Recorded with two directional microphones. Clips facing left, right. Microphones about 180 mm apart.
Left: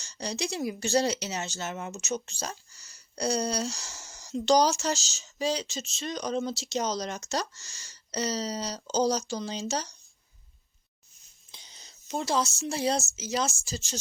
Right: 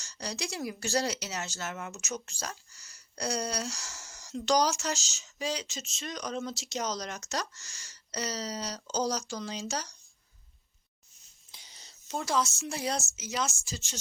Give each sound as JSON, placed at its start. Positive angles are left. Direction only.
{"t": 0.0, "sound": "speech", "side_deg": 25}
{"t": 11.5, "sound": "whispering", "side_deg": 20}
{"t": 12.2, "sound": "speech", "side_deg": 30}